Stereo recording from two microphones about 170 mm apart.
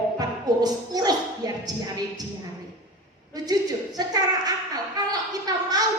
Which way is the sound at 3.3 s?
20° right (ahead or behind).